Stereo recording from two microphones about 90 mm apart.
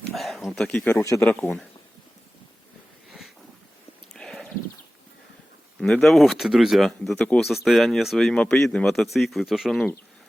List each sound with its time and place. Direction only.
0.1 s a sound: centre (ahead or behind)
1.0 s speech: 35° left (ahead or behind)
1.3 s speech: 20° left (ahead or behind)
3.1 s a sound: centre (ahead or behind)
4.1 s horse: 5° left (ahead or behind)
5.8 s speech: 5° left (ahead or behind)
7.2 s speech: 15° left (ahead or behind)
7.4 s speech: centre (ahead or behind)